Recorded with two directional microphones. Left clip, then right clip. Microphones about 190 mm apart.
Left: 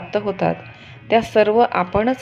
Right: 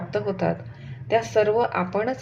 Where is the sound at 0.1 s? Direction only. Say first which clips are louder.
Left 5 dB; 20° left (ahead or behind).